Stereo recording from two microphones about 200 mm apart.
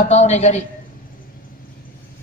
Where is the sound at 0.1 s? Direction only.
35° left (ahead or behind).